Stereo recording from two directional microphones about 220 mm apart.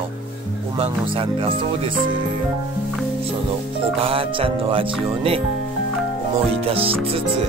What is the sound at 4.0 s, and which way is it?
Speech, 25° right (ahead or behind).